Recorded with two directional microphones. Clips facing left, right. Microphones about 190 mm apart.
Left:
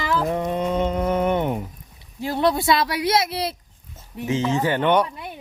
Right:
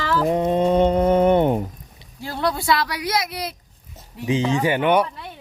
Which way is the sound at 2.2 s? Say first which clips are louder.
Left 4 dB; 20° left (ahead or behind).